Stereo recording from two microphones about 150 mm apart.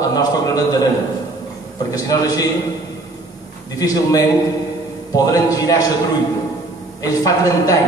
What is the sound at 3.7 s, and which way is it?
A man's voice, 25° left (ahead or behind).